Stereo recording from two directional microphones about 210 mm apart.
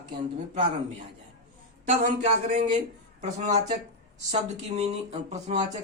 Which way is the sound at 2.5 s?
35° right (ahead or behind).